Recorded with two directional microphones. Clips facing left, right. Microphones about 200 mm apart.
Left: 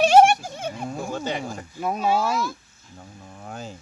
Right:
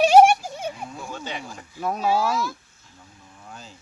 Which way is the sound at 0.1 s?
15° right (ahead or behind).